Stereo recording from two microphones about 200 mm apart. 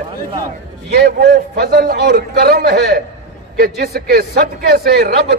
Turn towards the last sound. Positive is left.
turn(degrees=-55)  # may be behind; listen again after turning